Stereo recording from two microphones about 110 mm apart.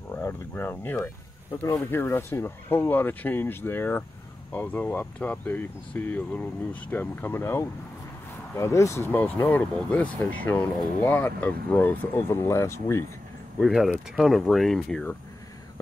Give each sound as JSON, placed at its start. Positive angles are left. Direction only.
{"t": 0.1, "sound": "speech", "side_deg": 20}
{"t": 13.6, "sound": "speech", "side_deg": 0}